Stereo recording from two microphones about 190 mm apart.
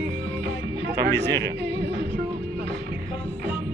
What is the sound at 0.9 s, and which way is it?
Speech, 60° right (ahead or behind).